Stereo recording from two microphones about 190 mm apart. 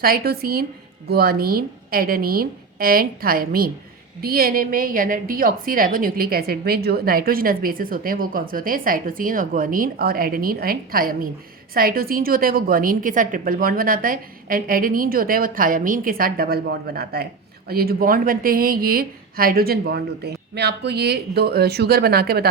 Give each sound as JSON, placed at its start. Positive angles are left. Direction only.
{"t": 0.0, "sound": "a woman's voice", "side_deg": -50}